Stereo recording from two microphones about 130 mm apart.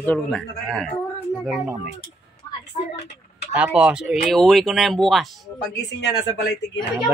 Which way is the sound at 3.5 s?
10° right (ahead or behind).